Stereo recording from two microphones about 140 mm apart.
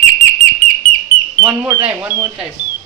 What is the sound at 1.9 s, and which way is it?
Speech, 15° right (ahead or behind).